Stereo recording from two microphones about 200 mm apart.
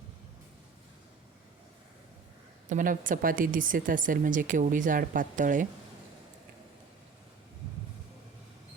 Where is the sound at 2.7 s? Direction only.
40° right (ahead or behind).